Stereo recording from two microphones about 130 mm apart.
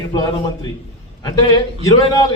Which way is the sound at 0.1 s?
30° left (ahead or behind).